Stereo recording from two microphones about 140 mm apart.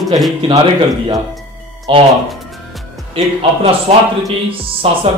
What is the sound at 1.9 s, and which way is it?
Speech, 35° right (ahead or behind).